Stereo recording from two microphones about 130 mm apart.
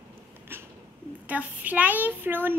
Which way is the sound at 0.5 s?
20° right (ahead or behind).